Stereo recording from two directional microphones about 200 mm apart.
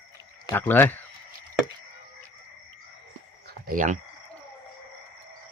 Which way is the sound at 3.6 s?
40° right (ahead or behind).